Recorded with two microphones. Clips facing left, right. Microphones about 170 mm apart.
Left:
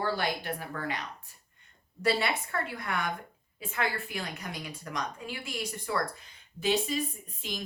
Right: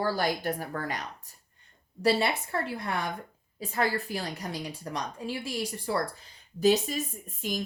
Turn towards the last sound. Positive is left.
turn(degrees=-45)  # may be behind; listen again after turning